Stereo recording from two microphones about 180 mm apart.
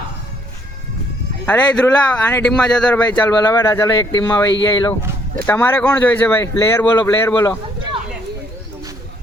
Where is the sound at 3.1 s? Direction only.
20° left (ahead or behind).